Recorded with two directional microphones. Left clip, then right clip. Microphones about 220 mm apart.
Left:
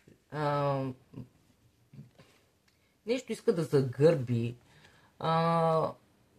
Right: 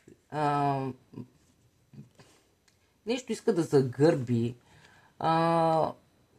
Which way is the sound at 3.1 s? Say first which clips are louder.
Right 1 dB; 45° right (ahead or behind).